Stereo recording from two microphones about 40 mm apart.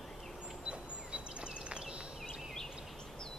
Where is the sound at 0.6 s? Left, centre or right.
Right.